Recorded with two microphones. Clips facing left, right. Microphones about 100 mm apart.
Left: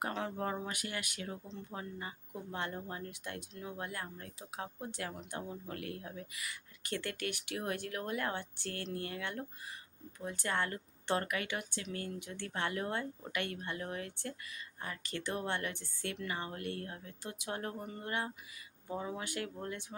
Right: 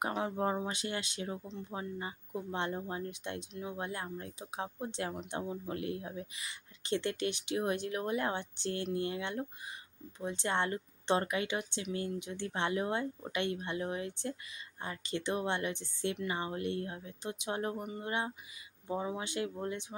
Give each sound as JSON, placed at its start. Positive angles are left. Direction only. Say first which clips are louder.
{"t": 0.0, "sound": "speech", "louder": "right 4 dB", "side_deg": -15}